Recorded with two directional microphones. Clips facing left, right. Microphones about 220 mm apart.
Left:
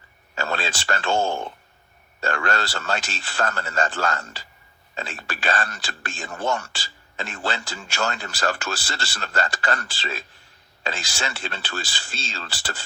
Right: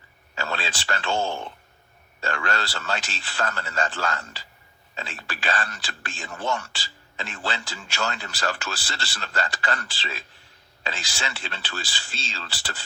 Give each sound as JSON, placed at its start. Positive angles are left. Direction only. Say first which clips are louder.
{"t": 0.3, "sound": "a man's voice", "louder": "left 3 dB", "side_deg": 45}